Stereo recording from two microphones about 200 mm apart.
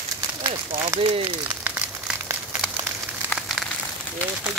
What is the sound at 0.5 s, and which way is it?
Speech, 25° right (ahead or behind).